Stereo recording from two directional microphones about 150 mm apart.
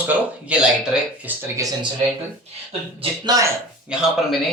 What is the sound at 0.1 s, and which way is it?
Speech, 10° right (ahead or behind).